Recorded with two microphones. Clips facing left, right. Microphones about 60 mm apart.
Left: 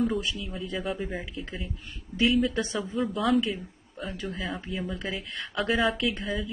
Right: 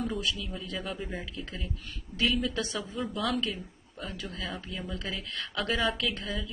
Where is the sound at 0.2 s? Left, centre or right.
Left.